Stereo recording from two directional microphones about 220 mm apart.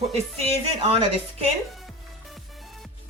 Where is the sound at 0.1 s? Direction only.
30° right (ahead or behind).